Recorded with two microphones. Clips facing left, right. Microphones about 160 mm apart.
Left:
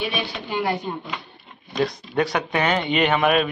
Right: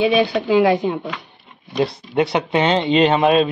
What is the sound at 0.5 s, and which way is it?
Speech, 90° right.